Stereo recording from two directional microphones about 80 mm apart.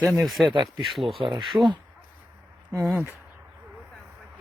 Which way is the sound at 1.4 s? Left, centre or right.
Centre.